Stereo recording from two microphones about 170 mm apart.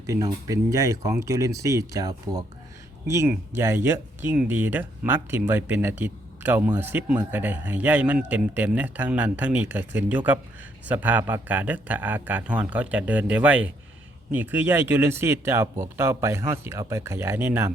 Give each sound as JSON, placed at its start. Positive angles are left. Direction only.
{"t": 0.0, "sound": "speech", "side_deg": -20}